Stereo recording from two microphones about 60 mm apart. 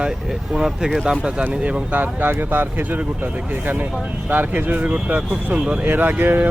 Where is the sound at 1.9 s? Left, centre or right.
Right.